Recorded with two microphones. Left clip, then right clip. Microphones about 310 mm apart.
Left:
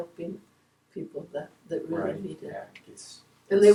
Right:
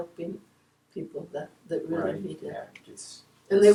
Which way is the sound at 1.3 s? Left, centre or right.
Centre.